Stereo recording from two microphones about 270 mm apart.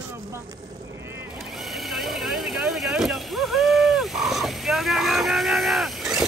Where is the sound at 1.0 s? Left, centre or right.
Centre.